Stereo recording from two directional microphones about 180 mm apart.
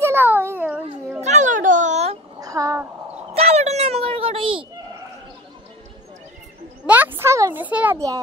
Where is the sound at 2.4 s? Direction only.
20° right (ahead or behind).